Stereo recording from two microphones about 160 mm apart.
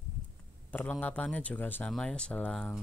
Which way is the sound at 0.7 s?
10° left (ahead or behind).